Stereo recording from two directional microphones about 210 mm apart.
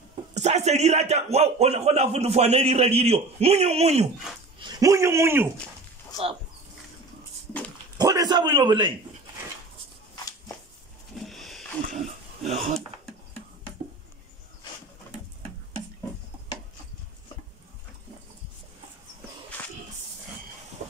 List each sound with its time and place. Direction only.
0.3 s a man's voice: 35° right (ahead or behind)
4.6 s speech: 20° right (ahead or behind)
6.1 s speech: 15° left (ahead or behind)
8.0 s a man's voice: 20° right (ahead or behind)
11.1 s roaring cats: centre (ahead or behind)
13.0 s a sound: 5° left (ahead or behind)